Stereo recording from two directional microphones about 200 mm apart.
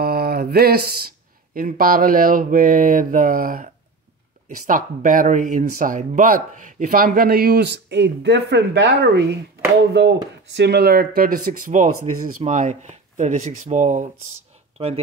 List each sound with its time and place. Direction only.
0.0 s speech: 50° right (ahead or behind); by 14.9 s 30° right (ahead or behind)